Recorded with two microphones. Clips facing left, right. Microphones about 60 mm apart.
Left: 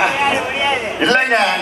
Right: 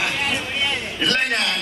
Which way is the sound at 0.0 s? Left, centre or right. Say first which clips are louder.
Left 8 dB; left.